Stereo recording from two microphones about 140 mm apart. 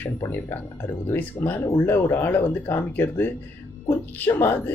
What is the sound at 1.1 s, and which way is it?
Speech, 15° left (ahead or behind).